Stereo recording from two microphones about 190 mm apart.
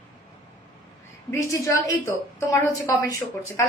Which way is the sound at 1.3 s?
15° left (ahead or behind).